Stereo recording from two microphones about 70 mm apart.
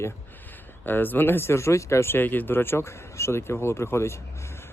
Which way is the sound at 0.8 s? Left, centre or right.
Left.